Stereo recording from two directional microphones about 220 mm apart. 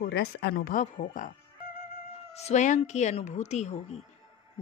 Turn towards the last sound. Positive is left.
turn(degrees=30)  # may be behind; listen again after turning